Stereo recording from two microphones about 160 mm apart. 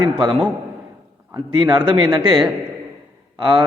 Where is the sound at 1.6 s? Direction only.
30° right (ahead or behind).